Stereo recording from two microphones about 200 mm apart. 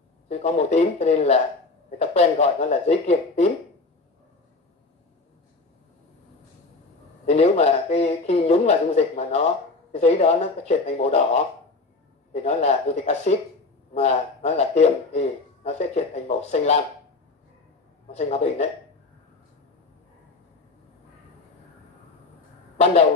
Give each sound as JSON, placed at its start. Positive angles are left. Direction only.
{"t": 0.3, "sound": "speech", "side_deg": 30}
{"t": 7.2, "sound": "a man's voice", "side_deg": 30}
{"t": 18.1, "sound": "speech", "side_deg": 35}